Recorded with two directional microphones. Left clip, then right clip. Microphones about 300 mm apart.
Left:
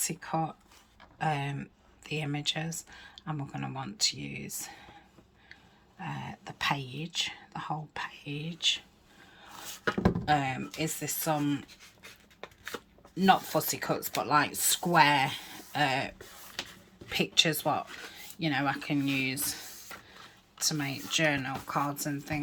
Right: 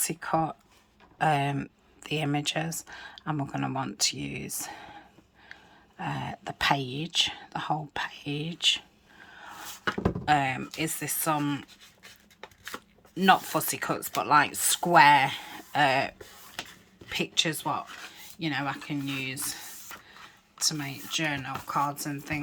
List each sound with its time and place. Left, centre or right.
0.0 s speech: centre
10.2 s speech: centre
13.2 s speech: centre
20.6 s speech: centre